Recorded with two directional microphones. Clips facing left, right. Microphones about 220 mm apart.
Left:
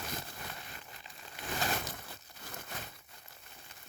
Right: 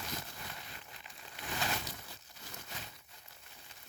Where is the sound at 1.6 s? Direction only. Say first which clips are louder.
Left 3 dB; 50° left (ahead or behind).